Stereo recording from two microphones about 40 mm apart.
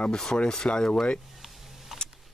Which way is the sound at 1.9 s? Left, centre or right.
Centre.